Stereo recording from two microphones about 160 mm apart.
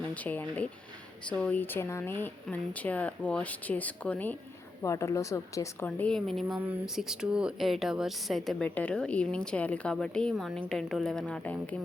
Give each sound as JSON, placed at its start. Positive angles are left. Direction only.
{"t": 0.1, "sound": "speech", "side_deg": 10}